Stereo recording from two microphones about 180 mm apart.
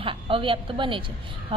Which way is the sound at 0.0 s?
30° right (ahead or behind).